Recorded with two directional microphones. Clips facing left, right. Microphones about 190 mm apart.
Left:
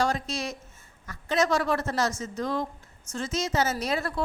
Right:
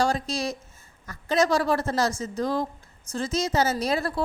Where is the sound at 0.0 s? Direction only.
35° right (ahead or behind).